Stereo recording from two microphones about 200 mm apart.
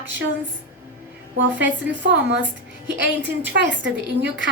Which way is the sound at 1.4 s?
65° right (ahead or behind).